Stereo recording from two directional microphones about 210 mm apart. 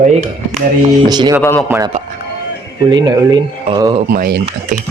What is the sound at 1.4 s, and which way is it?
Speech, 10° left (ahead or behind).